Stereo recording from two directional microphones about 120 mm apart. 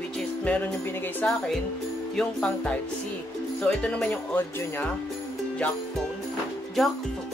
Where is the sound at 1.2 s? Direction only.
10° left (ahead or behind).